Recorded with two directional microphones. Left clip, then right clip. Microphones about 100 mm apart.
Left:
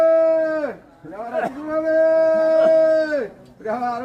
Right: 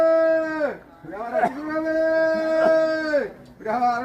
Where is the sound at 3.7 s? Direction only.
Centre (ahead or behind).